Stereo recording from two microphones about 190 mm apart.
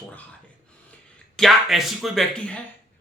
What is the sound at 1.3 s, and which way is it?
Speech, centre (ahead or behind).